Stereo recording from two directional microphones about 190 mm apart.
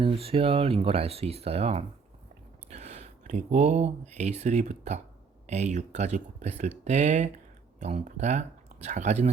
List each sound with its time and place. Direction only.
0.0 s speech: 30° right (ahead or behind)